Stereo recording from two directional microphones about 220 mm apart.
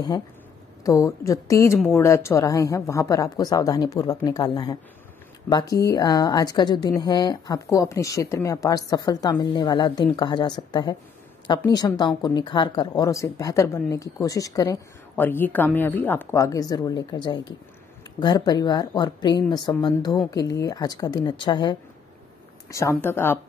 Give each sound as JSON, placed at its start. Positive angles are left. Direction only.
{"t": 0.8, "sound": "speech", "side_deg": 15}